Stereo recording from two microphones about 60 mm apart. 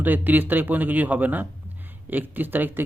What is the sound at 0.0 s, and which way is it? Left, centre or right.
Speech, right.